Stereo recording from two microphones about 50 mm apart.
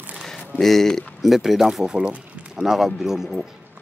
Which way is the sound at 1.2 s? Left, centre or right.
Centre.